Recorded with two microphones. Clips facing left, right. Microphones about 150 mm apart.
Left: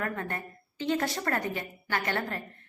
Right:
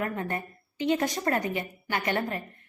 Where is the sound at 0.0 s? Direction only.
20° right (ahead or behind).